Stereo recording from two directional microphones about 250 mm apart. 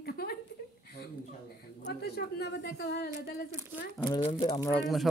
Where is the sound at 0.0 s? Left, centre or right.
Left.